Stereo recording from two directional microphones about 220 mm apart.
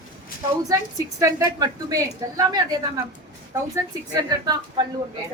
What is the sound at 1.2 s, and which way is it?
A woman's voice, 15° right (ahead or behind).